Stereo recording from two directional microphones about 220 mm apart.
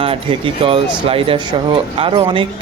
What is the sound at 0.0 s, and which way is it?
Speech, 25° right (ahead or behind).